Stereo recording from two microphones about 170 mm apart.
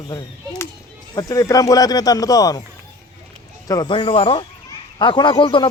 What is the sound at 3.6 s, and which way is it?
A man's voice, 25° left (ahead or behind).